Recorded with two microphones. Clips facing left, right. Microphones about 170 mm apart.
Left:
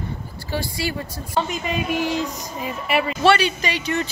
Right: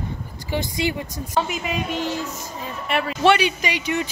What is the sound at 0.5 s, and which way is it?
Speech, 20° right (ahead or behind).